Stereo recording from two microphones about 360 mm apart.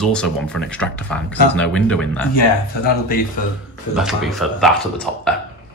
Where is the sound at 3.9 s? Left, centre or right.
Centre.